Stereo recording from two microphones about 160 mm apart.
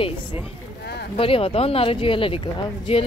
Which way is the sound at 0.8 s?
90° left.